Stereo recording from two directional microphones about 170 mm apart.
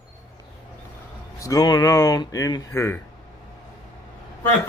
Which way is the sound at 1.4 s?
20° left (ahead or behind).